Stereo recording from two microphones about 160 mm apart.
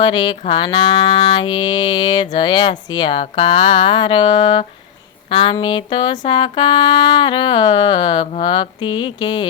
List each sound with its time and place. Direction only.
0.0 s mantra: 30° left (ahead or behind)